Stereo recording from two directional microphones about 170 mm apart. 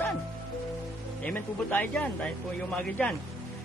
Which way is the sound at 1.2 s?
10° left (ahead or behind).